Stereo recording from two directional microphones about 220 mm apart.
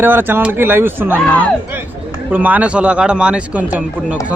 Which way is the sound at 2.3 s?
5° right (ahead or behind).